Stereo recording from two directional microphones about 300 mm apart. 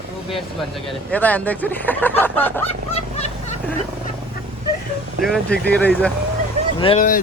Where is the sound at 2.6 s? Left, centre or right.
Left.